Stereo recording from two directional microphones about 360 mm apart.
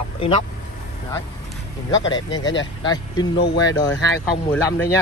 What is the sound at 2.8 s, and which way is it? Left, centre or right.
Speech, centre.